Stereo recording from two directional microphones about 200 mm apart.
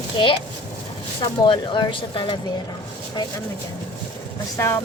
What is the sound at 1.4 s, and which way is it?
Speech, 25° left (ahead or behind).